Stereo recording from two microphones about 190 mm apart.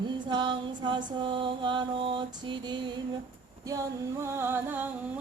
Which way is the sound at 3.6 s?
15° right (ahead or behind).